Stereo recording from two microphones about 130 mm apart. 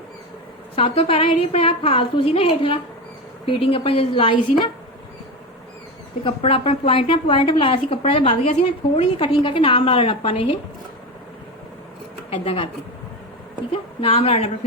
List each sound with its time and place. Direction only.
0.8 s a woman's voice: 50° left (ahead or behind)
6.2 s a woman's voice: 50° left (ahead or behind)
12.3 s a woman's voice: 45° left (ahead or behind)
14.0 s a woman's voice: 50° left (ahead or behind)